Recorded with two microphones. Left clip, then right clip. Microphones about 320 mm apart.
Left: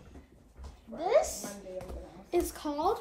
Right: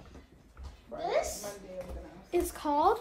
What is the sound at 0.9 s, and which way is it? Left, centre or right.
Speech, centre.